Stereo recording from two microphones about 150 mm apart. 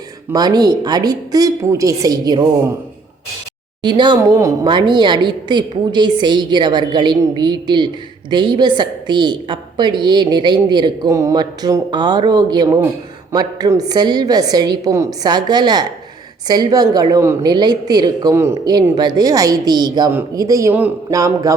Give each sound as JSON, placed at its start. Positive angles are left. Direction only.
{"t": 0.3, "sound": "a woman's voice", "side_deg": -25}
{"t": 3.8, "sound": "a woman's voice", "side_deg": -30}